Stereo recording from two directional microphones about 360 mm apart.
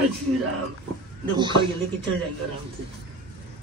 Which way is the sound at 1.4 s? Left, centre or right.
Centre.